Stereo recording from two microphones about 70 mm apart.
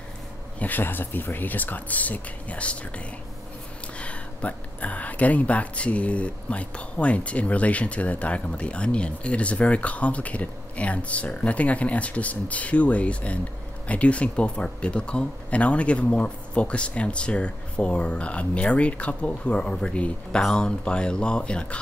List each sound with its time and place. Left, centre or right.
0.6 s speech: left
4.0 s speech: centre